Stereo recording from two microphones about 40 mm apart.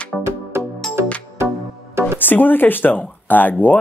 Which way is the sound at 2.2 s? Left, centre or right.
Left.